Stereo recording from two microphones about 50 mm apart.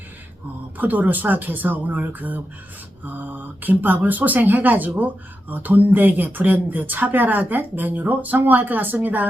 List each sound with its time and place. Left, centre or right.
0.8 s speech: right